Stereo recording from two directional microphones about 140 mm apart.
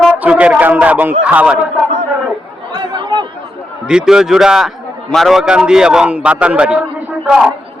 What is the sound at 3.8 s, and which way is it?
A man's voice, 5° right (ahead or behind).